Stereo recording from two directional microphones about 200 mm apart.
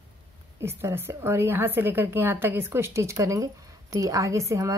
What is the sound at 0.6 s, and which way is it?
A woman's voice, 10° right (ahead or behind).